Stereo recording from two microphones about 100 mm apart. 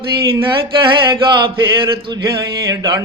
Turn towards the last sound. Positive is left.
turn(degrees=-35)  # may be behind; listen again after turning